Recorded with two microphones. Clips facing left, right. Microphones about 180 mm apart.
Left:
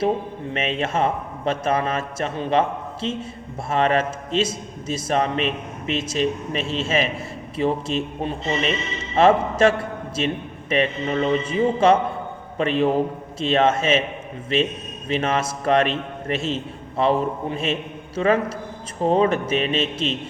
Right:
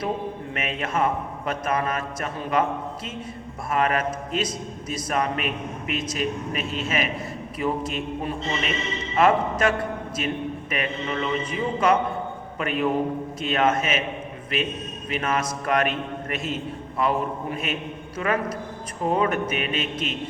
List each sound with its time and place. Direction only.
0.5 s a man's voice: 30° left (ahead or behind)
15.1 s a man's voice: 30° left (ahead or behind)